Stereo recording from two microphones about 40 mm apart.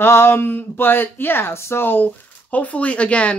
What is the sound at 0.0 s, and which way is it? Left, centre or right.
Speech, left.